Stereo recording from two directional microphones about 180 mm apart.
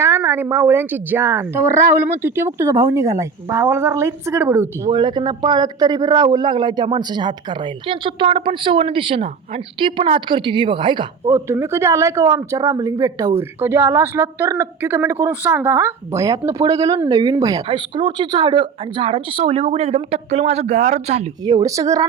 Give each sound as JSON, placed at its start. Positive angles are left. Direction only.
{"t": 0.0, "sound": "a woman's voice", "side_deg": -15}
{"t": 4.9, "sound": "speech", "side_deg": -25}
{"t": 11.3, "sound": "a woman's voice", "side_deg": -15}
{"t": 21.4, "sound": "speech", "side_deg": -20}